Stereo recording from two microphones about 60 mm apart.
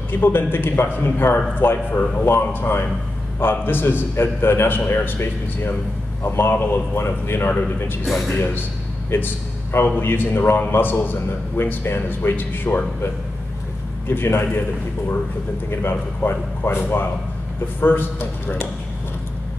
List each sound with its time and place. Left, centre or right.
0.1 s a man's voice: left
9.1 s a man's voice: left
14.0 s a man's voice: left
15.7 s a man's voice: left